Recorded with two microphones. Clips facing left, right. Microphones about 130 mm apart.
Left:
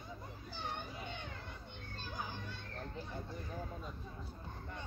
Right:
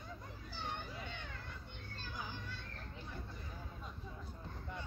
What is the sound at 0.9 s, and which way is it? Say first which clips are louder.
Children playing: left 2 dB; 20° left (ahead or behind).